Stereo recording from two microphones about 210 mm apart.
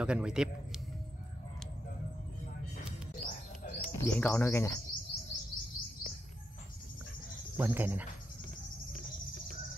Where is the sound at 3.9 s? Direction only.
5° left (ahead or behind).